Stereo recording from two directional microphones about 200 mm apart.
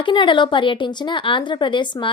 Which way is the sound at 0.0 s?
25° left (ahead or behind).